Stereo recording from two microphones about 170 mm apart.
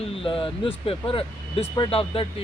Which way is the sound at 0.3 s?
30° left (ahead or behind).